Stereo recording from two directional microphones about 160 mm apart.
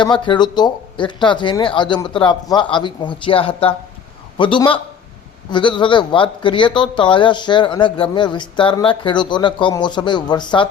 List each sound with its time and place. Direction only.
0.0 s a man's voice: 30° left (ahead or behind)